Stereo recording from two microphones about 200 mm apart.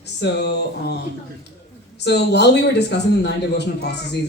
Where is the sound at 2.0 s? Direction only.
55° left (ahead or behind).